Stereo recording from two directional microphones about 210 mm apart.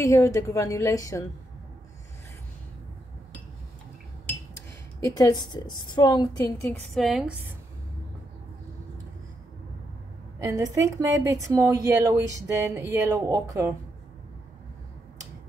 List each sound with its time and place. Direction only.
0.0 s a woman's voice: 15° left (ahead or behind)
5.0 s a woman's voice: 15° left (ahead or behind)
6.9 s a woman's voice: centre (ahead or behind)
10.4 s a woman's voice: 15° right (ahead or behind)